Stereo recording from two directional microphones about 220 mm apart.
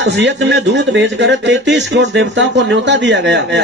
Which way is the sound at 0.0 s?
55° right (ahead or behind).